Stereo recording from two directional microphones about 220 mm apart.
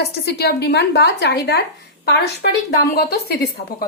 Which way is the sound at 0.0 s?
45° left (ahead or behind).